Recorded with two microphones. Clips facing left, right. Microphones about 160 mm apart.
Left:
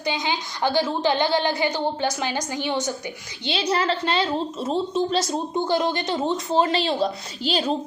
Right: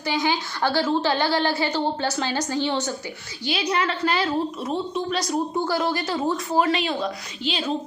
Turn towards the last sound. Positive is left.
turn(degrees=35)  # may be behind; listen again after turning